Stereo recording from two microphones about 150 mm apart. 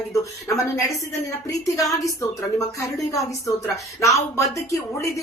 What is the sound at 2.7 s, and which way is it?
Speech, 20° left (ahead or behind).